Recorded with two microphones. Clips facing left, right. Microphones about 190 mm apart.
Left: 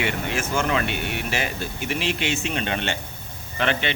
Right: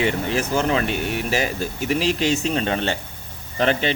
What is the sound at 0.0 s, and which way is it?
Speech, 35° right (ahead or behind).